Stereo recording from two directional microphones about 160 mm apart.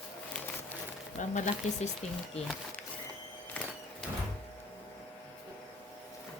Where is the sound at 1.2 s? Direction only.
50° left (ahead or behind).